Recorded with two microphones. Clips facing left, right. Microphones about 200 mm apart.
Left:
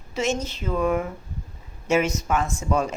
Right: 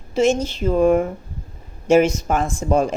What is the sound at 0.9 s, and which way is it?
Speech, 45° right (ahead or behind).